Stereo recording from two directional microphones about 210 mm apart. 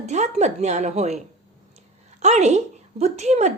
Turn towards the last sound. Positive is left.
turn(degrees=-30)  # may be behind; listen again after turning